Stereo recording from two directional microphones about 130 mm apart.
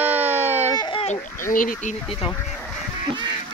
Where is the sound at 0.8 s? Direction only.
40° left (ahead or behind).